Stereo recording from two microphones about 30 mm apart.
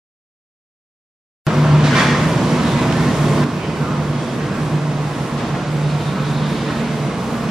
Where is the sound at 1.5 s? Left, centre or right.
Centre.